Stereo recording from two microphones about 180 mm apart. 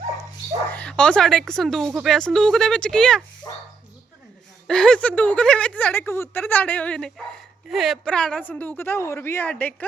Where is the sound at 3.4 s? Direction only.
15° left (ahead or behind).